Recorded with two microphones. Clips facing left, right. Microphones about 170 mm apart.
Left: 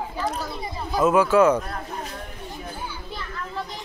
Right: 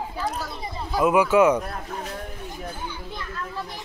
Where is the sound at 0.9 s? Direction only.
15° right (ahead or behind).